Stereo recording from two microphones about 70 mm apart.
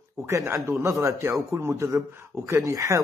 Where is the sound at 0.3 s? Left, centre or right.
Right.